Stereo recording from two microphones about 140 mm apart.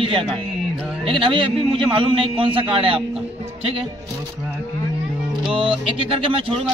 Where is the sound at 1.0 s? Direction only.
35° right (ahead or behind).